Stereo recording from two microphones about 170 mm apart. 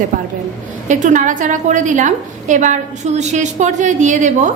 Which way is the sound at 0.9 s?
45° right (ahead or behind).